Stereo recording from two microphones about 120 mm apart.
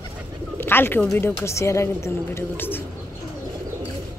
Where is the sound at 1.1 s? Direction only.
20° left (ahead or behind).